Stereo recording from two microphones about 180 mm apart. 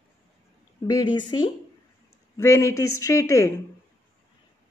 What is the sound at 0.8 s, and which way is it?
A woman's voice, 20° left (ahead or behind).